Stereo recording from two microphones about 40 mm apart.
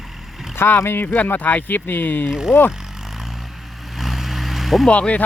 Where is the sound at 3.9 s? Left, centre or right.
Centre.